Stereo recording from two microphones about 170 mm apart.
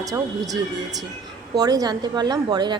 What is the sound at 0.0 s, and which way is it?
A woman's voice, 20° right (ahead or behind).